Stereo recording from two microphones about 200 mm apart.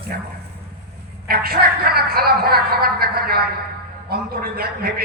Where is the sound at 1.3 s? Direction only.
50° right (ahead or behind).